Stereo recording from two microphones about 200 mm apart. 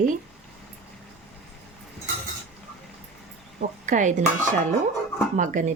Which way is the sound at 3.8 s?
40° right (ahead or behind).